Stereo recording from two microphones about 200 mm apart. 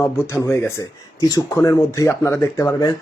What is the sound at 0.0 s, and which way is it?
Speech, 15° left (ahead or behind).